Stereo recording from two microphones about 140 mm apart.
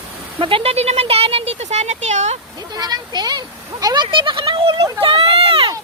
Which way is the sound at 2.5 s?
30° right (ahead or behind).